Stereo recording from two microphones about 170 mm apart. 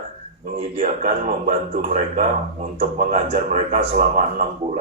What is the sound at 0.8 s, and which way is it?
A man's voice, 45° right (ahead or behind).